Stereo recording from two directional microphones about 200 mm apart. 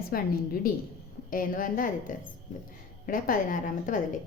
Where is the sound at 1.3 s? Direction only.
45° left (ahead or behind).